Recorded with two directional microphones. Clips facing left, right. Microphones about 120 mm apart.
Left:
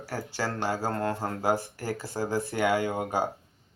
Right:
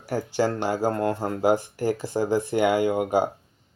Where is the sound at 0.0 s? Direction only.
15° right (ahead or behind).